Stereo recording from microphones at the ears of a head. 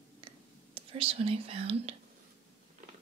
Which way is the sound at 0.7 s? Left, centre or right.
Right.